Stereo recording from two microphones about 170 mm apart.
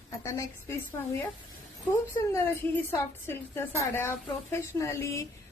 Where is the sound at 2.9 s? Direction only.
15° left (ahead or behind).